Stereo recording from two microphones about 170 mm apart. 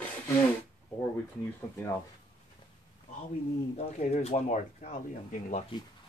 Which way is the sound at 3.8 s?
40° left (ahead or behind).